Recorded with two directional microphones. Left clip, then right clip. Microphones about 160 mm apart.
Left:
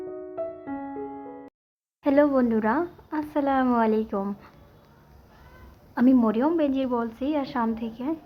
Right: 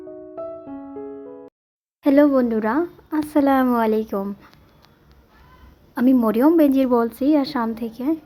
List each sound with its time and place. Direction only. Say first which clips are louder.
0.3 s music: right 2 dB; centre (ahead or behind)
2.0 s speech: right 5 dB; 35° right (ahead or behind)
5.9 s a woman's voice: right 3 dB; 30° right (ahead or behind)
6.3 s a woman's voice: right 8 dB; 50° right (ahead or behind)